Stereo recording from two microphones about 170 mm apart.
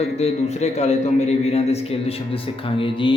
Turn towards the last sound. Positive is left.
turn(degrees=30)  # may be behind; listen again after turning